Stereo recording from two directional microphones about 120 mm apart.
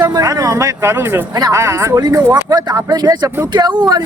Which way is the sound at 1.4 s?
30° right (ahead or behind).